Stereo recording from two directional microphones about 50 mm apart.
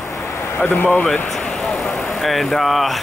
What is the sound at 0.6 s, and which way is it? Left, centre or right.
Speech, left.